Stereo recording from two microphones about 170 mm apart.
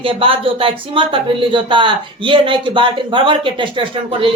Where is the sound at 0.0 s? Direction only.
30° right (ahead or behind).